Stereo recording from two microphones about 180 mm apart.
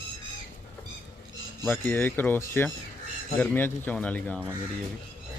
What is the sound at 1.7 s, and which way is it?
Speech, 10° left (ahead or behind).